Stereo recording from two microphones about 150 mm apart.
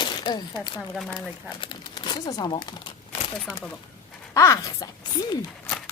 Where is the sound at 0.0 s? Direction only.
30° left (ahead or behind).